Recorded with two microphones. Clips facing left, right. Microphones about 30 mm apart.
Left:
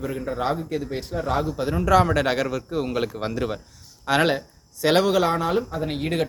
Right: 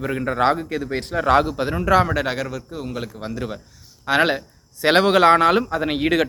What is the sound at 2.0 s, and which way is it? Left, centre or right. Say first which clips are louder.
Speech: left 1 dB; centre.